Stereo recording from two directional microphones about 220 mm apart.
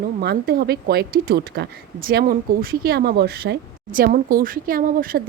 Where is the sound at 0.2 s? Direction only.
45° right (ahead or behind).